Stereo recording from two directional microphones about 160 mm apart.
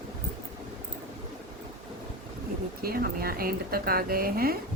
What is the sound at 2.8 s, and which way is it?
A woman's voice, 70° right (ahead or behind).